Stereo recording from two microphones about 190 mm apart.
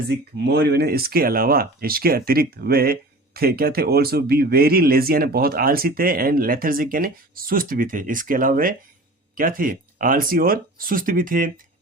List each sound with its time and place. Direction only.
0.1 s speech: 60° right (ahead or behind)